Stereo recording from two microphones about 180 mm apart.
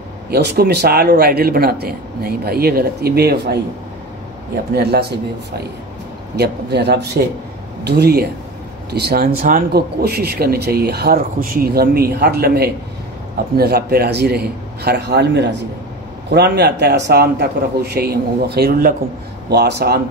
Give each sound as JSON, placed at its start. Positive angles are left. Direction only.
{"t": 0.3, "sound": "speech", "side_deg": -65}
{"t": 6.3, "sound": "speech", "side_deg": -65}
{"t": 19.5, "sound": "speech", "side_deg": -65}